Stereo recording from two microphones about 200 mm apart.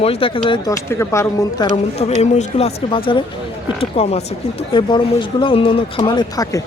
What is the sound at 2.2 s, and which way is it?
Speech, 35° left (ahead or behind).